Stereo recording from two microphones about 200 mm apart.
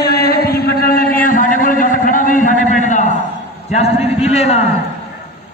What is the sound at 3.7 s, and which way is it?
A man's voice, 30° left (ahead or behind).